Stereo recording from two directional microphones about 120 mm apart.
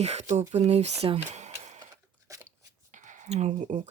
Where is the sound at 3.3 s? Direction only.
65° right (ahead or behind).